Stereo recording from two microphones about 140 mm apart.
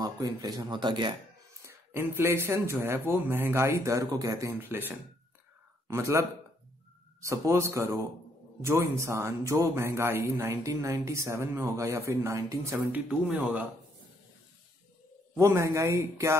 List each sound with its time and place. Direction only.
0.0 s a man's voice: 25° right (ahead or behind)
1.6 s a man's voice: 15° right (ahead or behind)
13.1 s speech: 10° right (ahead or behind)
15.3 s a man's voice: 20° right (ahead or behind)